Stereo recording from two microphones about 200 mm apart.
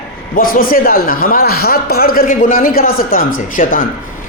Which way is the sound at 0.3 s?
45° left (ahead or behind).